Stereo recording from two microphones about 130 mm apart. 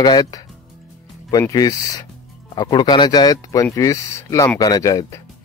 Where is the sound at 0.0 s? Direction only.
30° left (ahead or behind).